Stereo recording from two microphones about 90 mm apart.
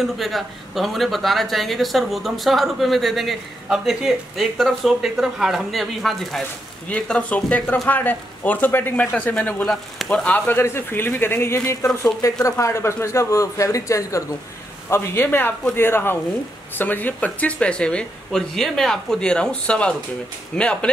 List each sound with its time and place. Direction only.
0.0 s a woman's voice: centre (ahead or behind)
6.9 s speech: 15° left (ahead or behind); by 14.2 s 35° left (ahead or behind)
14.9 s speech: 25° left (ahead or behind)